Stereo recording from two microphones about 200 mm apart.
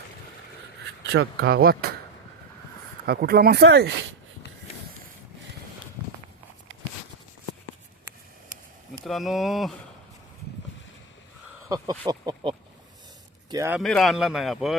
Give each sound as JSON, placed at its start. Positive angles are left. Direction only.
{"t": 1.1, "sound": "speech", "side_deg": -60}
{"t": 3.1, "sound": "speech", "side_deg": -50}
{"t": 9.0, "sound": "speech", "side_deg": 0}
{"t": 11.7, "sound": "speech", "side_deg": -20}
{"t": 13.7, "sound": "speech", "side_deg": 0}